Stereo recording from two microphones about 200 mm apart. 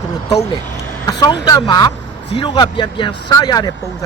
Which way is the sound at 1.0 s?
20° left (ahead or behind).